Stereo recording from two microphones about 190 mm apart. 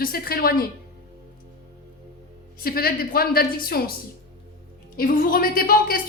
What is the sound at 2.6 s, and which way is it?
A woman's voice, 50° left (ahead or behind).